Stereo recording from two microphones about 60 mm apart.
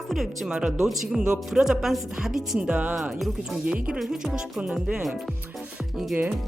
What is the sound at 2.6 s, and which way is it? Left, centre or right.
Music, right.